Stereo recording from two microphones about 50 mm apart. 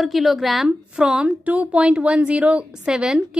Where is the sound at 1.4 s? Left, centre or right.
Right.